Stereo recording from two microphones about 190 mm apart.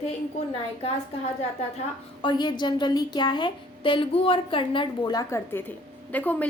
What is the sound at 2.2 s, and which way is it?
A woman's voice, 25° left (ahead or behind).